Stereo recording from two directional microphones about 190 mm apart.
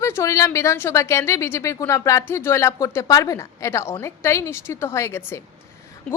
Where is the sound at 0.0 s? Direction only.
15° left (ahead or behind).